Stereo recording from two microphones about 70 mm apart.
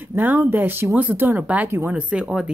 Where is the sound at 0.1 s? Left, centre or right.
Right.